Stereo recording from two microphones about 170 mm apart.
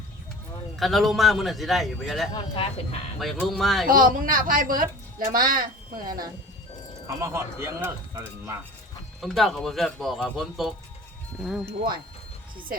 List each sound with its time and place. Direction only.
0.8 s a man's voice: centre (ahead or behind)
2.3 s speech: 30° left (ahead or behind)
3.2 s a man's voice: centre (ahead or behind)
3.8 s a woman's voice: 55° right (ahead or behind)
7.1 s speech: 15° right (ahead or behind)
9.2 s a man's voice: centre (ahead or behind)